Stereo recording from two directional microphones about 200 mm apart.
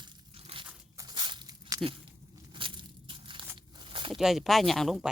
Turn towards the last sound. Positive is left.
turn(degrees=0)  # may be behind; listen again after turning